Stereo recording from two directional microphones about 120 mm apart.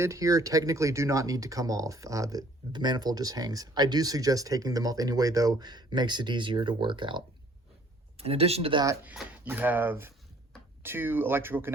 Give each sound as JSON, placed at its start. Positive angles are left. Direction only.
{"t": 0.0, "sound": "speech", "side_deg": -25}
{"t": 8.2, "sound": "speech", "side_deg": -55}
{"t": 9.4, "sound": "speech", "side_deg": -15}